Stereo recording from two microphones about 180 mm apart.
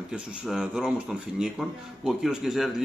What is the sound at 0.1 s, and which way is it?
Speech, 5° right (ahead or behind).